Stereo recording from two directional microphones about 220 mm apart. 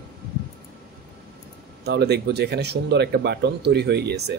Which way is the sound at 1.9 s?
50° right (ahead or behind).